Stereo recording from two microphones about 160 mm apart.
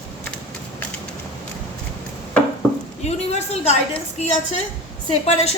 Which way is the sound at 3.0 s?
45° left (ahead or behind).